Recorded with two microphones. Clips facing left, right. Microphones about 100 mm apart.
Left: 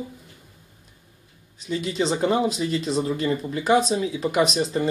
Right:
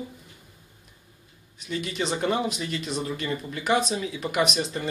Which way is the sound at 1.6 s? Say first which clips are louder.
Left 5 dB; 25° left (ahead or behind).